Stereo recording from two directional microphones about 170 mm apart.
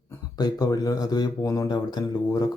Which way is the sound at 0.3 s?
20° left (ahead or behind).